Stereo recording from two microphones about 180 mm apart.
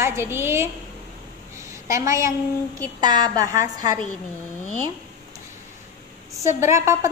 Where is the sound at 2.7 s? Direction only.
20° right (ahead or behind).